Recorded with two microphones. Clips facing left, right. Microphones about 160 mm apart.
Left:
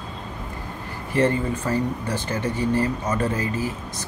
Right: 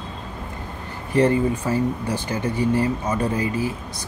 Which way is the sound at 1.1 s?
10° right (ahead or behind).